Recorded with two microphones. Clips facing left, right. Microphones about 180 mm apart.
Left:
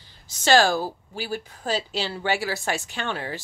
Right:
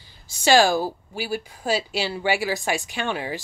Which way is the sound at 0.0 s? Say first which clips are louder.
Right 3 dB; 10° right (ahead or behind).